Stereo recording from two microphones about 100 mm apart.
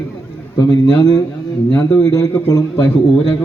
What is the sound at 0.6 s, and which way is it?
A man's voice, 30° left (ahead or behind).